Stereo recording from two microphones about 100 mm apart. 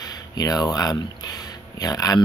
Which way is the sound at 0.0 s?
40° left (ahead or behind).